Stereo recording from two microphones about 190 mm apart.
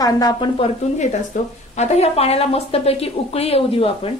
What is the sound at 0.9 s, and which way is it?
A woman's voice, 35° left (ahead or behind).